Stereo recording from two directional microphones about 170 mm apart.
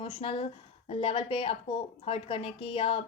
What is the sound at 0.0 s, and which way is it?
A woman's voice, 35° left (ahead or behind).